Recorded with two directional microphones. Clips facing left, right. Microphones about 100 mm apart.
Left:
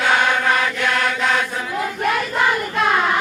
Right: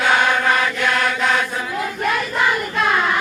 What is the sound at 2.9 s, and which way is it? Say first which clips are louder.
Child singing: left 1 dB; 35° left (ahead or behind).